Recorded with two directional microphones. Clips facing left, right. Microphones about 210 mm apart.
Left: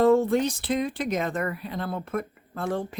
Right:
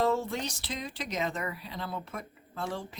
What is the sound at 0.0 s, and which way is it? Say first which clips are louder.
Speech: left 9 dB; 55° left (ahead or behind).